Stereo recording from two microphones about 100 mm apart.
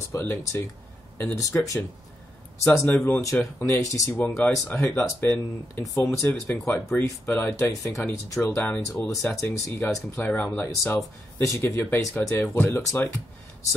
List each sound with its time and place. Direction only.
0.1 s speech: 20° left (ahead or behind)
4.2 s speech: 15° left (ahead or behind)